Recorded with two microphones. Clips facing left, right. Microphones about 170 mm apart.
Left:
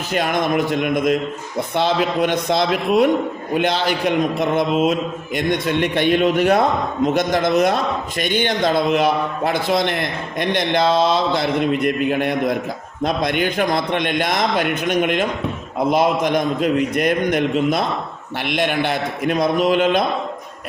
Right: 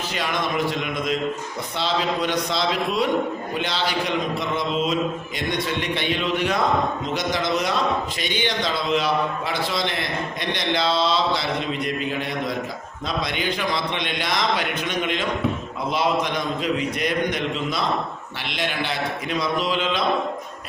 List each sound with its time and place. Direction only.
0.1 s a man's voice: 50° left (ahead or behind)